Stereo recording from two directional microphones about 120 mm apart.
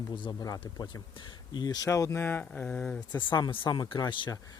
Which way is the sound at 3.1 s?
40° left (ahead or behind).